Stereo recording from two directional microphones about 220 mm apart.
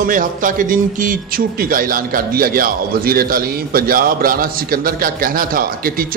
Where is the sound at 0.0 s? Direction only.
40° right (ahead or behind).